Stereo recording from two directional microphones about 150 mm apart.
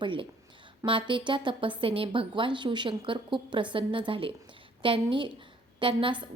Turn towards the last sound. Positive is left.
turn(degrees=-35)  # may be behind; listen again after turning